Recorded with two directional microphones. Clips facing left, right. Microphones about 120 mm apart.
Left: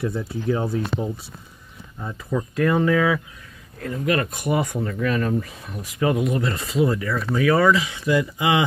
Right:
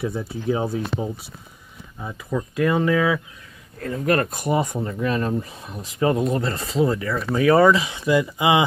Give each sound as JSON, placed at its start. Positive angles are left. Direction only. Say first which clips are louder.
{"t": 0.0, "sound": "speech", "louder": "even", "side_deg": -10}
{"t": 2.5, "sound": "speech", "louder": "even", "side_deg": -20}
{"t": 3.8, "sound": "speech", "louder": "right 2 dB", "side_deg": -45}